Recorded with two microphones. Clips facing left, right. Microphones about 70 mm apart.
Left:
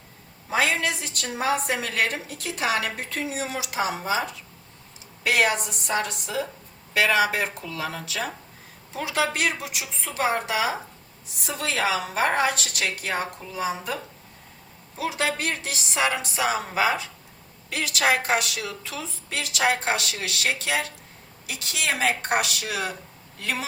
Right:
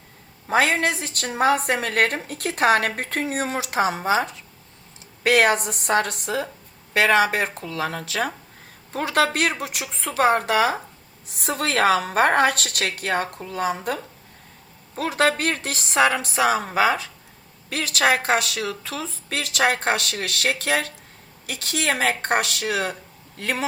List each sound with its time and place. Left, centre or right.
0.4 s a woman's voice: right